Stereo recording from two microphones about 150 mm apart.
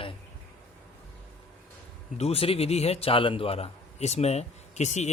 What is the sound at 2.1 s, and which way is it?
Speech, 40° left (ahead or behind).